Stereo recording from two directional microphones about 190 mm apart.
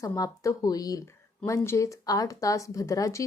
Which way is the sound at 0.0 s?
15° left (ahead or behind).